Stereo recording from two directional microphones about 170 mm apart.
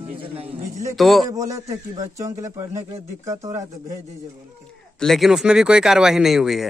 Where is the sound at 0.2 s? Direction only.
35° right (ahead or behind).